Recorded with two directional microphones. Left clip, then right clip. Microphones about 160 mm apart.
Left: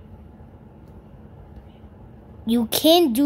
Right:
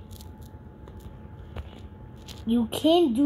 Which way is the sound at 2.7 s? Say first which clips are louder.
Left 5 dB; 20° left (ahead or behind).